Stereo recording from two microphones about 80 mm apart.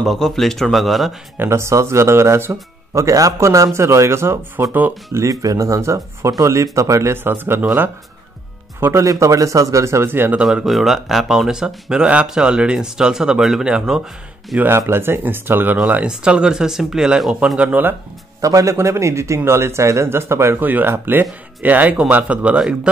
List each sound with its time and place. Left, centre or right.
0.0 s speech: centre
1.4 s a man's voice: right
5.1 s a man's voice: right
8.7 s a man's voice: right
10.4 s speech: centre
14.6 s speech: right
16.1 s speech: centre
18.4 s a man's voice: right; by 22.6 s centre